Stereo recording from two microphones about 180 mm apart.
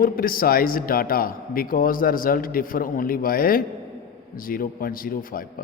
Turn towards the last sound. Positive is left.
turn(degrees=50)  # may be behind; listen again after turning